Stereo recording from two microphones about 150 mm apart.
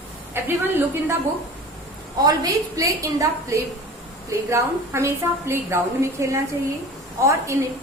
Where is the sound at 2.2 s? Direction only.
25° right (ahead or behind).